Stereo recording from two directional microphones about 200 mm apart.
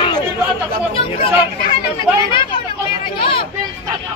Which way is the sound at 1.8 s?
25° left (ahead or behind).